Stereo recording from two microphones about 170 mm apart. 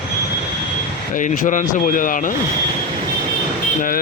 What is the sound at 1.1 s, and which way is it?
Speech, 50° left (ahead or behind).